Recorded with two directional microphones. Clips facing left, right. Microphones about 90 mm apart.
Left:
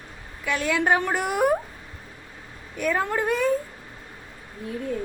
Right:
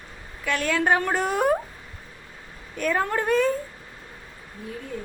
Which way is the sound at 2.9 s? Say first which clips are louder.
Right 1 dB; 10° left (ahead or behind).